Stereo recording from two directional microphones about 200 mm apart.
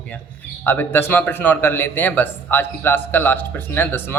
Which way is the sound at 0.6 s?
10° left (ahead or behind).